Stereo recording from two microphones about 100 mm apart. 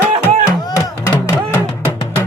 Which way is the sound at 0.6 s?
35° left (ahead or behind).